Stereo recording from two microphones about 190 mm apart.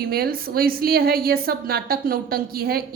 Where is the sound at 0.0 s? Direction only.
50° right (ahead or behind).